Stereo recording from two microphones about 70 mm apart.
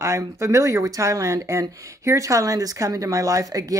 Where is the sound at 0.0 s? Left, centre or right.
Right.